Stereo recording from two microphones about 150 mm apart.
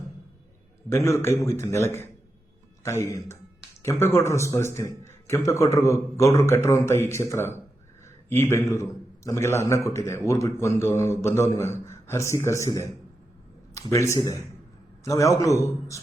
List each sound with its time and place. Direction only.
0.9 s a man's voice: 15° left (ahead or behind)